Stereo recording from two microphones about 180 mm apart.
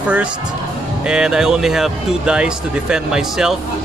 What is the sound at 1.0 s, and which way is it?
Speech, 5° right (ahead or behind).